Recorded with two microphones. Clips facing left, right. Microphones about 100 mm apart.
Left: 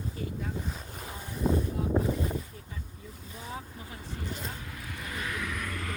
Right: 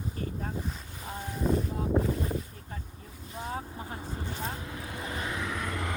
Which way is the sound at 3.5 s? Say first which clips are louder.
Right 4 dB; 40° right (ahead or behind).